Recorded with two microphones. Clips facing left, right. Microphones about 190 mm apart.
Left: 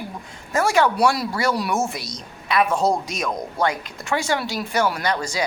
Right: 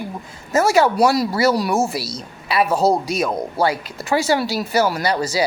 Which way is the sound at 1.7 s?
35° right (ahead or behind).